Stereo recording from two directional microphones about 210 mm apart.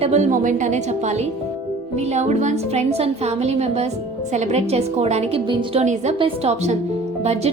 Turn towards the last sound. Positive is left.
turn(degrees=-30)  # may be behind; listen again after turning